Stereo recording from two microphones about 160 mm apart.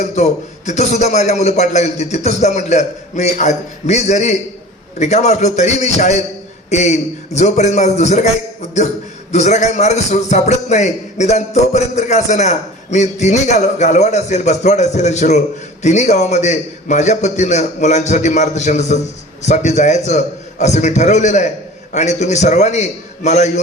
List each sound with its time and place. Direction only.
0.0 s a man's voice: 45° left (ahead or behind)
9.3 s a man's voice: 45° left (ahead or behind)